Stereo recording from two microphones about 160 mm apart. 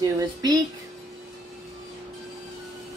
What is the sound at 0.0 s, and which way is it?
Speech, 25° right (ahead or behind).